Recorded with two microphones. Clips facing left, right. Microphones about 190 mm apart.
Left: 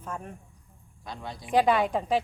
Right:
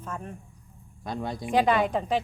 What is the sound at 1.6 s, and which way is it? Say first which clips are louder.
Speech: even; 5° left (ahead or behind).